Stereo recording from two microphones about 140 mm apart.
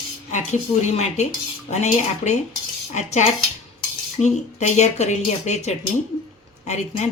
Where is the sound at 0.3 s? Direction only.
60° left (ahead or behind).